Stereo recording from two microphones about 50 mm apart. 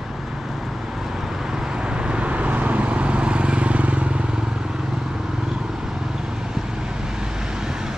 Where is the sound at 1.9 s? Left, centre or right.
Centre.